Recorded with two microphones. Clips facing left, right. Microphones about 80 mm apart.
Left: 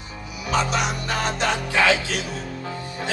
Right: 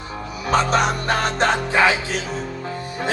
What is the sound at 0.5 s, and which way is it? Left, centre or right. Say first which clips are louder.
Music: right 5 dB; right.